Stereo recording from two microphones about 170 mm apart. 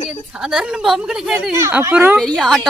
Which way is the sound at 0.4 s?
5° right (ahead or behind).